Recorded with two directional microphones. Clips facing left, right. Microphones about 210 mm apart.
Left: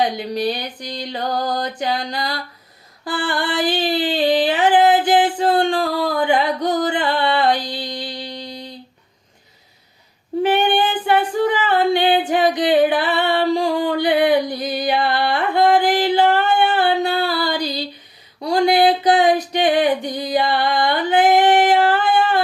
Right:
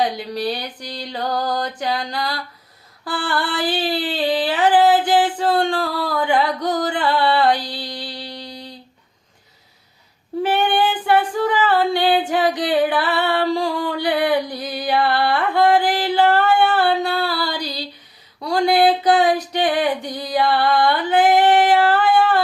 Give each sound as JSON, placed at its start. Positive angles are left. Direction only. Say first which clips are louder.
{"t": 0.0, "sound": "music", "louder": "left 2 dB", "side_deg": 20}
{"t": 3.0, "sound": "a sound", "louder": "left 1 dB", "side_deg": 20}
{"t": 10.4, "sound": "female singing", "louder": "left 1 dB", "side_deg": 20}
{"t": 18.3, "sound": "music", "louder": "left 1 dB", "side_deg": 20}